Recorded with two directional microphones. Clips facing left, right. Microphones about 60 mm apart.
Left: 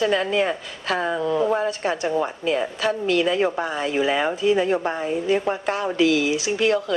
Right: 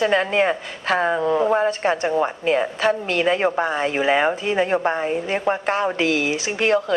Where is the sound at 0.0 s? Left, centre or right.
Right.